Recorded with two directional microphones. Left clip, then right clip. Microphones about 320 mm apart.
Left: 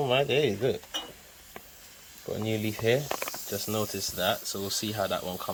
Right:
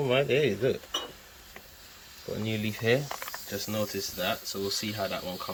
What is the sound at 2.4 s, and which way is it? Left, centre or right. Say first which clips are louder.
Speech: left 2 dB; centre.